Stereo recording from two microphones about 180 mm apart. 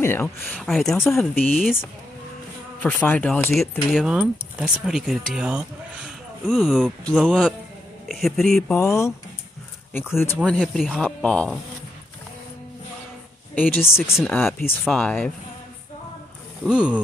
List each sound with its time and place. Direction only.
0.0 s a sound: 15° left (ahead or behind)
0.6 s speech: centre (ahead or behind)
2.8 s speech: 10° left (ahead or behind)
8.7 s speech: 15° left (ahead or behind)
10.1 s speech: 10° left (ahead or behind)
13.6 s speech: 10° left (ahead or behind)
16.6 s speech: 5° right (ahead or behind)